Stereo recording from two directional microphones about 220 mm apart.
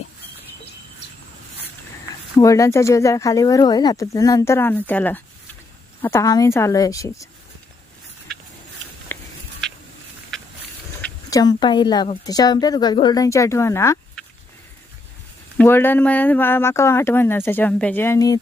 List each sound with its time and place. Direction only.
2.4 s a woman's voice: 15° left (ahead or behind)
9.1 s a sound: 10° left (ahead or behind)
11.3 s a woman's voice: 15° left (ahead or behind)
15.5 s a woman's voice: 10° left (ahead or behind)